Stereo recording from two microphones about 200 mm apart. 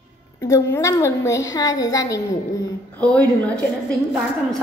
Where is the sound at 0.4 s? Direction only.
15° left (ahead or behind).